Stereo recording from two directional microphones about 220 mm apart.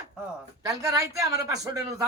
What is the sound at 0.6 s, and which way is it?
A man's voice, 15° right (ahead or behind).